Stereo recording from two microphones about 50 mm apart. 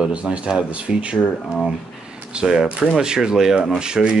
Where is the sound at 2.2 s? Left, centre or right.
Right.